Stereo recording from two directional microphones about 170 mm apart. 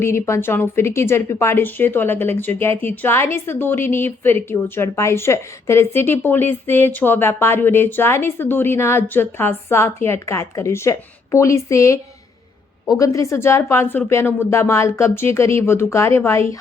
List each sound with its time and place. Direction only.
0.0 s a woman's voice: 15° left (ahead or behind)